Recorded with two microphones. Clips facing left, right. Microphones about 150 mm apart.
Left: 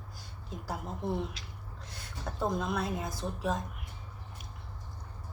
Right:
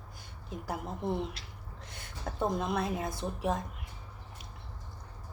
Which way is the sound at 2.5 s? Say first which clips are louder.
Even; 25° right (ahead or behind).